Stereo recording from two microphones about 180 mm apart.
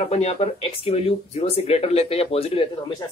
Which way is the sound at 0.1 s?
35° left (ahead or behind).